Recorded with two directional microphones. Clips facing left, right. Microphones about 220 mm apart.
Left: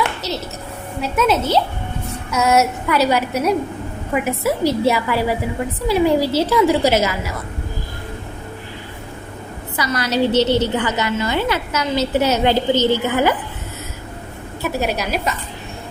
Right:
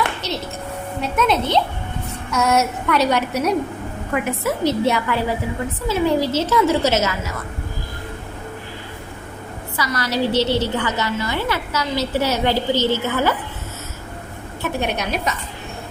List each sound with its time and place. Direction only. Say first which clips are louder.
0.2 s a woman's voice: even; centre (ahead or behind)
9.7 s a woman's voice: left 3 dB; 20° left (ahead or behind)
14.6 s a woman's voice: left 2 dB; 5° left (ahead or behind)